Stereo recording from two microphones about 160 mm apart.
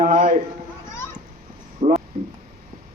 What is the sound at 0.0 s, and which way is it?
Run, 55° right (ahead or behind).